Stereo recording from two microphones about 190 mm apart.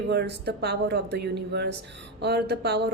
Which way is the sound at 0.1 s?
60° right (ahead or behind).